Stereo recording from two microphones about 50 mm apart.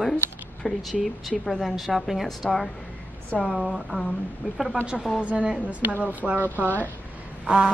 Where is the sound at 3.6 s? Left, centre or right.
Centre.